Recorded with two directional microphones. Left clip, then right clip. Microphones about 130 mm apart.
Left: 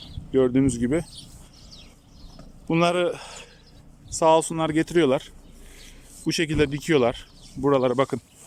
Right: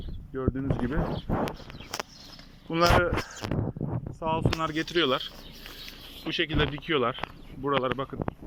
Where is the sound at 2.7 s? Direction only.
30° left (ahead or behind).